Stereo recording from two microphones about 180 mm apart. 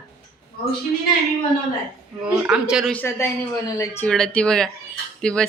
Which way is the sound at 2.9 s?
10° left (ahead or behind).